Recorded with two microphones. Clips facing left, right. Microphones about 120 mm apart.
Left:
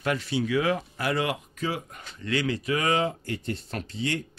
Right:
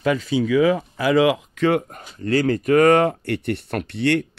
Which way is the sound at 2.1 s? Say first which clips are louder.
Right 8 dB; 40° right (ahead or behind).